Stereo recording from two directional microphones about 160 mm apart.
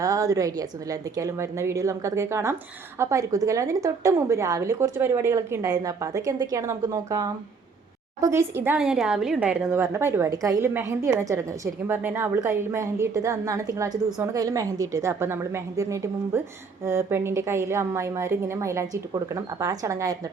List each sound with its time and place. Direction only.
0.0 s a woman's voice: 20° right (ahead or behind)